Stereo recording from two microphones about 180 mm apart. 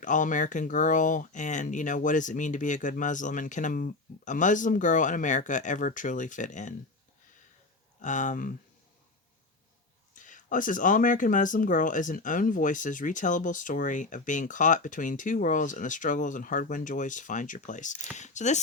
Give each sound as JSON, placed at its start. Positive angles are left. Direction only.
{"t": 0.0, "sound": "speech", "side_deg": 45}
{"t": 8.0, "sound": "speech", "side_deg": 45}
{"t": 10.2, "sound": "speech", "side_deg": 45}